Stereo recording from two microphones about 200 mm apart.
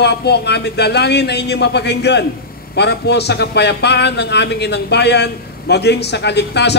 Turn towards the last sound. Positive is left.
turn(degrees=55)  # may be behind; listen again after turning